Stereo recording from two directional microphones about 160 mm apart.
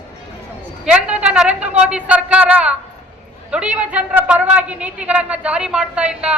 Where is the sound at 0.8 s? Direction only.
5° right (ahead or behind).